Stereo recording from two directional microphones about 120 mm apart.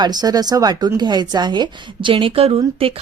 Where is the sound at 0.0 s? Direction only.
35° right (ahead or behind).